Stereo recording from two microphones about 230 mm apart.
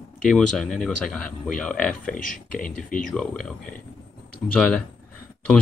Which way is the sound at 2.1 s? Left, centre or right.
Left.